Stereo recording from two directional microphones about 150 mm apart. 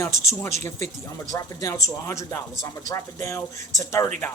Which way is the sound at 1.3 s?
20° left (ahead or behind).